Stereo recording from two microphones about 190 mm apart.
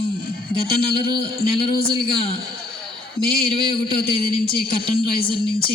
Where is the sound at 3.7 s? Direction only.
30° left (ahead or behind).